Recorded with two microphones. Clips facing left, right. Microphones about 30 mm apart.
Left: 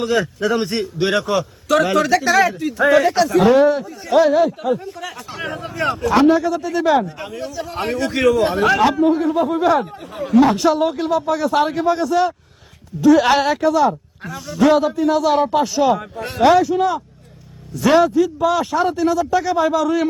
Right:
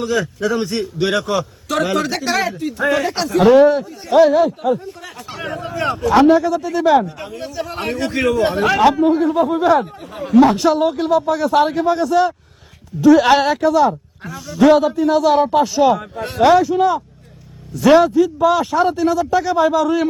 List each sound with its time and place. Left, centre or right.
0.0 s a man's voice: left
1.7 s speech: left
3.4 s a man's voice: centre
6.1 s a man's voice: centre
7.9 s a man's voice: right
8.6 s a man's voice: centre